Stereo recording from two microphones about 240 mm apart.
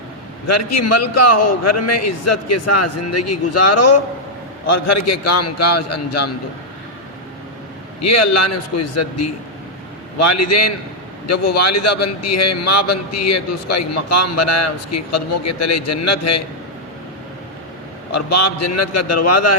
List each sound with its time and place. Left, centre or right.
0.4 s a man's voice: left
8.0 s a man's voice: left
18.1 s a man's voice: left